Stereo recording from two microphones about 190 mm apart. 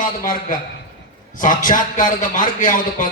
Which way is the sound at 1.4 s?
45° left (ahead or behind).